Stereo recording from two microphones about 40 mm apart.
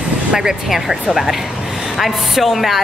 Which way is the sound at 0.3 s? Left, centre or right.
Centre.